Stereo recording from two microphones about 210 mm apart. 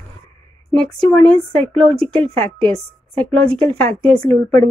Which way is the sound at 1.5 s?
25° right (ahead or behind).